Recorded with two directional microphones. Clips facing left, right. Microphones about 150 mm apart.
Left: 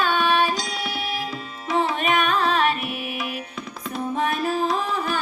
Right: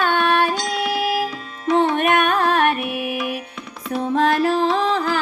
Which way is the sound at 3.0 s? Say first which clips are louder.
Right 6 dB; centre (ahead or behind).